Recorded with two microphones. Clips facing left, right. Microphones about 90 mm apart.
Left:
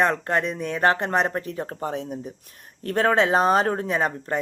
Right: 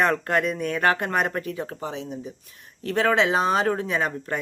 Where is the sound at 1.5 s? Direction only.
45° left (ahead or behind).